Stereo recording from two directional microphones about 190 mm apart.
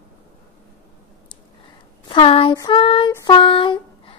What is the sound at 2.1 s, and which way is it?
Speech, 30° left (ahead or behind).